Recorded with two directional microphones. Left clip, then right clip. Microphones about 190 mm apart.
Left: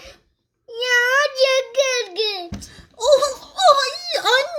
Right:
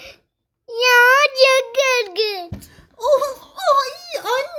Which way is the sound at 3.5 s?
5° left (ahead or behind).